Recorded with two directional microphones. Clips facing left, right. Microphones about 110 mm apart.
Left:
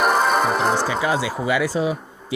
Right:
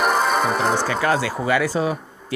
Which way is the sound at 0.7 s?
10° left (ahead or behind).